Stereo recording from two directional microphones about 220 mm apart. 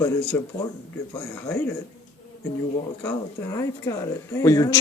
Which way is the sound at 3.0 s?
15° left (ahead or behind).